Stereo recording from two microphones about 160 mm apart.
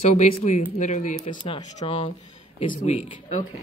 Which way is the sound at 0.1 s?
45° left (ahead or behind).